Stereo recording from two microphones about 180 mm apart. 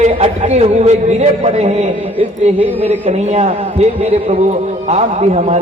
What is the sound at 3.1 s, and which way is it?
Speech, 35° right (ahead or behind).